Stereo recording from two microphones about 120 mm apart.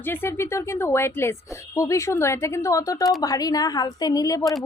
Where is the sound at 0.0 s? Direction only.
20° left (ahead or behind).